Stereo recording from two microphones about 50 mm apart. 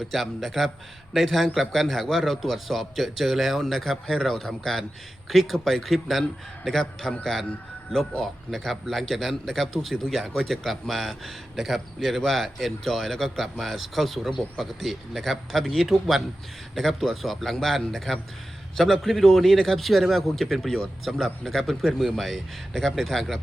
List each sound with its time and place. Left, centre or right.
0.1 s speech: centre
8.2 s speech: centre